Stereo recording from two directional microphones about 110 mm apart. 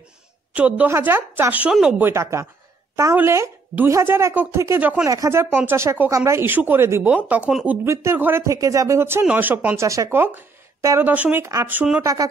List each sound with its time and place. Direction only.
0.6 s a woman's voice: 15° right (ahead or behind)
2.0 s a woman's voice: 20° right (ahead or behind)
7.8 s a woman's voice: 25° right (ahead or behind)
9.8 s a woman's voice: 25° right (ahead or behind)
12.0 s speech: 30° right (ahead or behind)